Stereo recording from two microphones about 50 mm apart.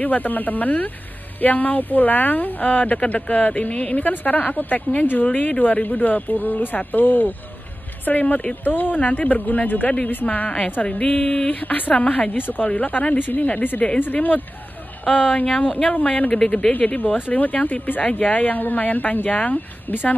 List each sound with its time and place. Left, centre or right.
0.0 s speech: left
11.6 s speech: left
12.4 s speech: left
12.6 s speech: left
15.6 s speech: left
16.8 s speech: centre
17.3 s speech: left